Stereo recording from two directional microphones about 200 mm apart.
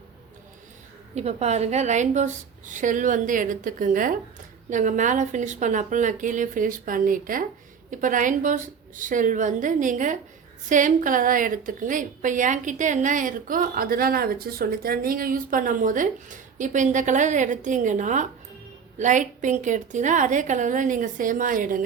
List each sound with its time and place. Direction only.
1.1 s a woman's voice: 35° right (ahead or behind)